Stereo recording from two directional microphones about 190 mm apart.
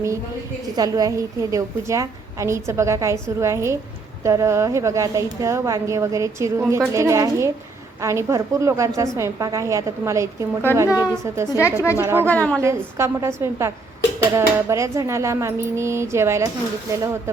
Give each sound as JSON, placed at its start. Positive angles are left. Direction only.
{"t": 0.8, "sound": "a woman's voice", "side_deg": -20}
{"t": 10.8, "sound": "a woman's voice", "side_deg": 15}
{"t": 11.1, "sound": "a woman's voice", "side_deg": -15}
{"t": 11.4, "sound": "a woman's voice", "side_deg": 15}
{"t": 11.9, "sound": "a woman's voice", "side_deg": -10}
{"t": 12.2, "sound": "a woman's voice", "side_deg": 10}
{"t": 12.6, "sound": "a woman's voice", "side_deg": -15}